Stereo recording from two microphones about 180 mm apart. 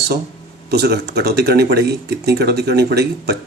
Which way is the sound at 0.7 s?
65° right (ahead or behind).